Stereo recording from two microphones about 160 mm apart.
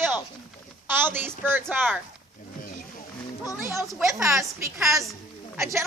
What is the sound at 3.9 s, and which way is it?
Speech, centre (ahead or behind).